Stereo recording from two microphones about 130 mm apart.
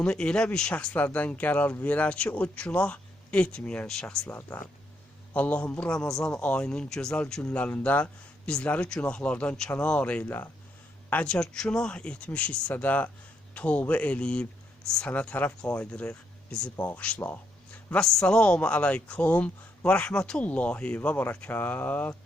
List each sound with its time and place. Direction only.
0.0 s a man's voice: 5° left (ahead or behind)
4.3 s a man's voice: 15° left (ahead or behind)